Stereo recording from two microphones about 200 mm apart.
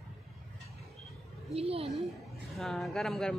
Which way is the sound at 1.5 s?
30° right (ahead or behind).